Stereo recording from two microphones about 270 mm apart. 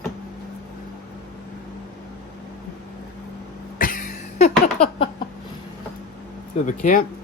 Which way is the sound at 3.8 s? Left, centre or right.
Left.